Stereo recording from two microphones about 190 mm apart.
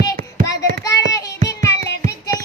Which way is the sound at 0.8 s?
15° left (ahead or behind).